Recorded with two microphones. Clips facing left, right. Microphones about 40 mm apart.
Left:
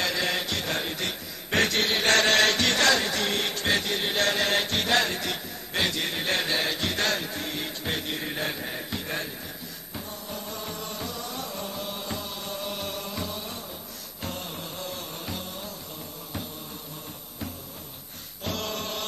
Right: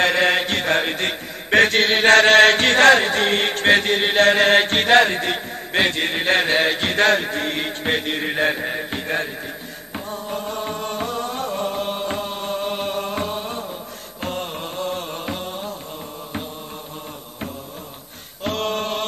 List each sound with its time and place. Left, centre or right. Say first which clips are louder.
0.0 s chant: right 10 dB; right
9.9 s music: right 9 dB; right
18.4 s chant: right 9 dB; right